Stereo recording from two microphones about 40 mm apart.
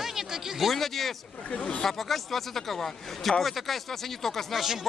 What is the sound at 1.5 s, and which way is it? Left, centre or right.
Speech, left.